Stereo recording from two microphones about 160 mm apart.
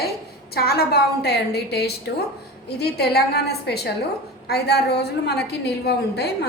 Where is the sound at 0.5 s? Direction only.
75° left (ahead or behind).